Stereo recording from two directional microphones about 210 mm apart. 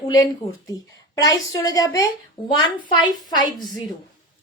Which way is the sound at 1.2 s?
15° left (ahead or behind).